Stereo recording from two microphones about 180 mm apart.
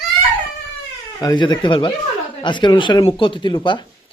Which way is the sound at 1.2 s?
25° left (ahead or behind).